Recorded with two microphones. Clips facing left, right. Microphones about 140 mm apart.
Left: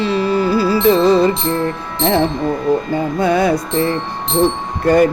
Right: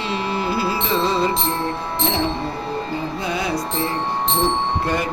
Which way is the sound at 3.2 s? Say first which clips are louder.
Left 11 dB; 55° left (ahead or behind).